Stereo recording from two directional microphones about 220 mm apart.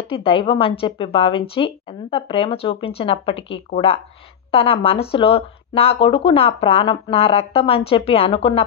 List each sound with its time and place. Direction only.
0.1 s speech: 25° left (ahead or behind)